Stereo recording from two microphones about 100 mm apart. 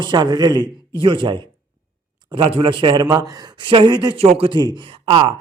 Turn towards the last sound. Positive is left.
turn(degrees=-60)  # may be behind; listen again after turning